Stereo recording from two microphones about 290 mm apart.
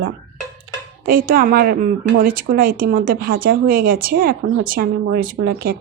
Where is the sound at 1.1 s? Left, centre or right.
Right.